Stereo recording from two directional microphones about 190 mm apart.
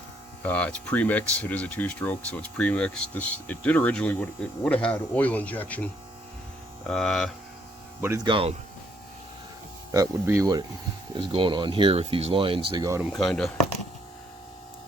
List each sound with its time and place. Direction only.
0.4 s speech: 5° left (ahead or behind)
8.0 s speech: 15° right (ahead or behind)
8.3 s speech: 30° right (ahead or behind)
9.9 s speech: 15° right (ahead or behind)
13.0 s speech: centre (ahead or behind)